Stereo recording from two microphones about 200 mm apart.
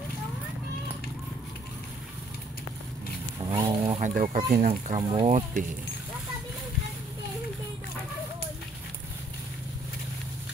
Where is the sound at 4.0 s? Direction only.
40° right (ahead or behind).